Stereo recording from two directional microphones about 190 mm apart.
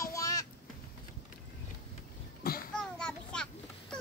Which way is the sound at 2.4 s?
50° left (ahead or behind).